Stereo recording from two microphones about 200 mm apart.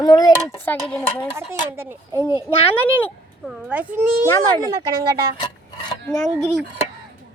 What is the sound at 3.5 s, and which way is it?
Speech, 5° right (ahead or behind).